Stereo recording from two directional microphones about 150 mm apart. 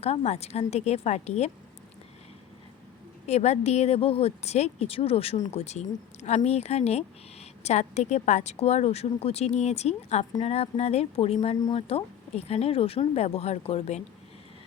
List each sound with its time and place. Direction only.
0.0 s a woman's voice: 45° left (ahead or behind)
3.2 s a woman's voice: 45° left (ahead or behind)